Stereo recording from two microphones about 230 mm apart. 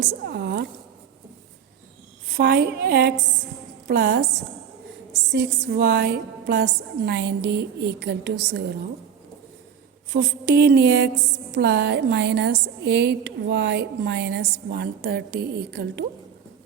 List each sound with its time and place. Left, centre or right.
0.0 s a woman's voice: right
2.3 s a woman's voice: right
5.3 s a woman's voice: right
10.1 s a sound: right
10.5 s a woman's voice: right